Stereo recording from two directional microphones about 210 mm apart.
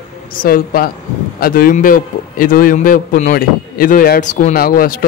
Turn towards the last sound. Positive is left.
turn(degrees=40)  # may be behind; listen again after turning